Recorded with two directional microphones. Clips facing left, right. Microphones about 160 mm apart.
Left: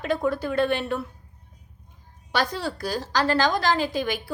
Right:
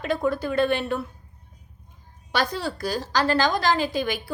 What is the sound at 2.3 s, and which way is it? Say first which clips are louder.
A woman's voice: even; 5° right (ahead or behind).